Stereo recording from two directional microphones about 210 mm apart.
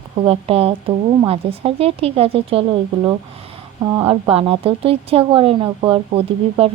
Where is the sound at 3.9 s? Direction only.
20° right (ahead or behind).